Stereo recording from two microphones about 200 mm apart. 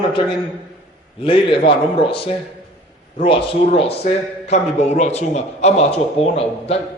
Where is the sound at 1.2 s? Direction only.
25° left (ahead or behind).